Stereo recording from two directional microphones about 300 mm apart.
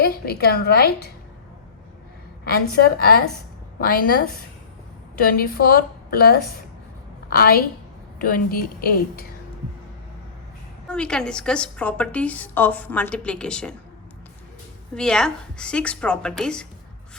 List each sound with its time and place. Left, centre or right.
0.0 s a woman's voice: left
2.4 s a woman's voice: left
5.2 s a woman's voice: left
10.8 s a woman's voice: centre
14.9 s a woman's voice: centre